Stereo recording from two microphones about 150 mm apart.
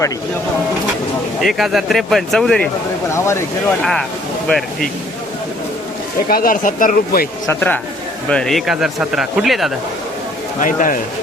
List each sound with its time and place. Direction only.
1.4 s speech: centre (ahead or behind)
3.1 s speech: 20° left (ahead or behind)
4.4 s speech: 5° left (ahead or behind)
6.2 s speech: 70° left (ahead or behind)
7.4 s speech: 15° left (ahead or behind)
10.6 s a man's voice: 60° left (ahead or behind)